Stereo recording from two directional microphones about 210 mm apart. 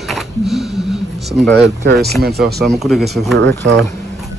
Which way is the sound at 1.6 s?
50° right (ahead or behind).